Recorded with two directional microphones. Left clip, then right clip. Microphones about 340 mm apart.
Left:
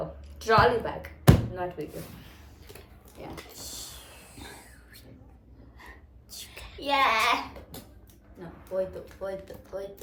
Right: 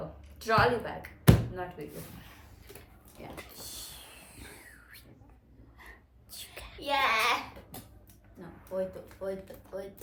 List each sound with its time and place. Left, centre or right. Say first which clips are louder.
0.3 s speech: left 4 dB; centre
3.2 s speech: left 4 dB; centre
3.8 s a sound: left 3 dB; right
6.3 s a sound: left 2 dB; centre
6.8 s a child's voice: left 4 dB; centre
8.4 s a child's voice: left 4 dB; centre